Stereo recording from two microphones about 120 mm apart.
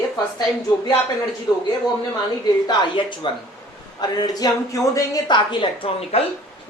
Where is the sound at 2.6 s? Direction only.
40° left (ahead or behind).